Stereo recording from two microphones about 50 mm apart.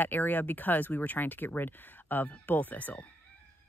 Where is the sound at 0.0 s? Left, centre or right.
Left.